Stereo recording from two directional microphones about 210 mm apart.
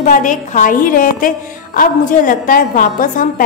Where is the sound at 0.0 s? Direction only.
40° left (ahead or behind).